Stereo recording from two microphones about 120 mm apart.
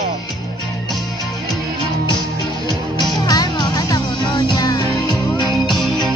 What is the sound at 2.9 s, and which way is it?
Music, 35° left (ahead or behind).